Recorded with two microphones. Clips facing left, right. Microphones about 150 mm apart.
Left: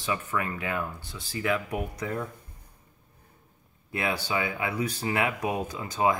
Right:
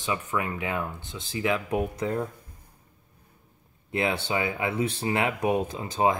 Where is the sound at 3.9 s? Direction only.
25° right (ahead or behind).